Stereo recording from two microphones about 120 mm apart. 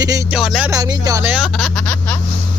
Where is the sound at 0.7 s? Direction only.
30° right (ahead or behind).